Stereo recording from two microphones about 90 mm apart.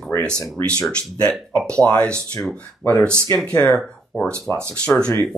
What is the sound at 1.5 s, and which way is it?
Speech, 10° left (ahead or behind).